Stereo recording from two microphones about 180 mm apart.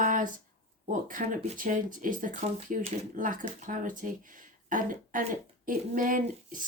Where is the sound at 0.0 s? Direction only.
50° right (ahead or behind).